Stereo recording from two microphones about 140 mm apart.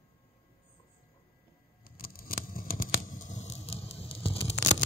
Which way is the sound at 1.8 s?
90° left.